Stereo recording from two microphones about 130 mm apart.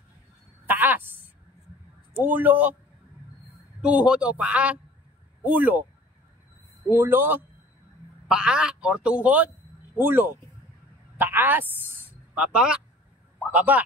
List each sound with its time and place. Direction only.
0.7 s a sound: 15° right (ahead or behind)
2.1 s a man's voice: 15° right (ahead or behind)
3.8 s a man's voice: 10° right (ahead or behind)
7.0 s a man's voice: 15° right (ahead or behind)